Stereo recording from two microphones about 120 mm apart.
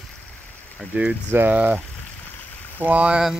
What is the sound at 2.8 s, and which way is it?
Speech, 10° right (ahead or behind).